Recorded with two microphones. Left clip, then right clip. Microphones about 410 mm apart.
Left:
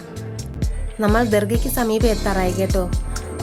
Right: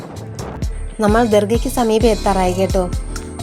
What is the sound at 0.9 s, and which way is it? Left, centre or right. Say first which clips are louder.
A woman's voice: right 4 dB; left.